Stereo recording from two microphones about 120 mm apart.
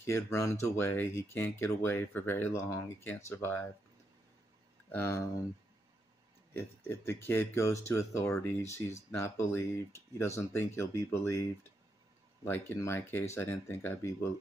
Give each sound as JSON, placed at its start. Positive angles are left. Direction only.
{"t": 0.0, "sound": "speech", "side_deg": 20}
{"t": 4.8, "sound": "speech", "side_deg": 20}
{"t": 6.5, "sound": "speech", "side_deg": 20}
{"t": 12.4, "sound": "speech", "side_deg": 20}